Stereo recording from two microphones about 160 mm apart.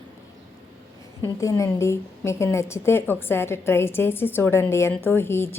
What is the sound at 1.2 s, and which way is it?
A woman's voice, 20° left (ahead or behind).